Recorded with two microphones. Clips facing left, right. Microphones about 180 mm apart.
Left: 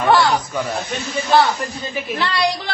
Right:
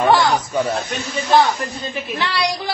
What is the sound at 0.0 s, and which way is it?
Speech, 15° right (ahead or behind).